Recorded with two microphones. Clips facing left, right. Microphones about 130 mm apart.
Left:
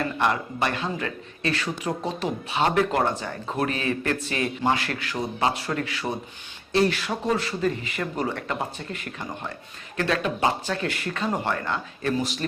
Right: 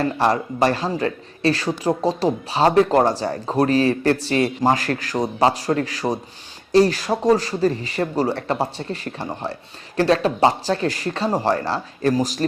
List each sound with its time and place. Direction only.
0.0 s speech: 35° right (ahead or behind)